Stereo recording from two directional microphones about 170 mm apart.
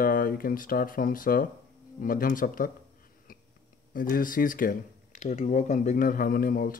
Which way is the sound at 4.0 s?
55° left (ahead or behind).